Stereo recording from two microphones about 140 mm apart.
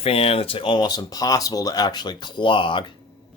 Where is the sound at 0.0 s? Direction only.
45° left (ahead or behind).